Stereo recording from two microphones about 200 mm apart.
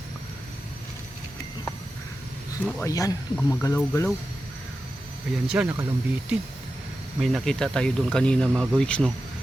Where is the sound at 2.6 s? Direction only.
15° left (ahead or behind).